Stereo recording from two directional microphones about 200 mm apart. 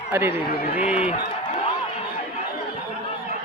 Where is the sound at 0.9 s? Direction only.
5° right (ahead or behind).